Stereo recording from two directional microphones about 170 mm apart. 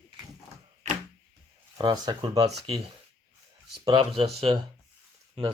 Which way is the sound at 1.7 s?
25° right (ahead or behind).